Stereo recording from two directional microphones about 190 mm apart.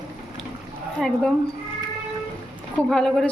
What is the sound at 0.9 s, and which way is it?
Speech, centre (ahead or behind).